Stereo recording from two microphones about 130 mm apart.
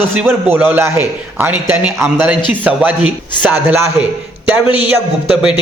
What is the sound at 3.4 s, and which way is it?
Speech, 15° right (ahead or behind).